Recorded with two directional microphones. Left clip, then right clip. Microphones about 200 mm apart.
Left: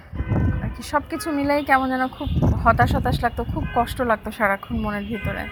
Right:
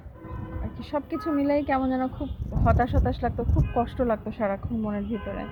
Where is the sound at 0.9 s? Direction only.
20° left (ahead or behind).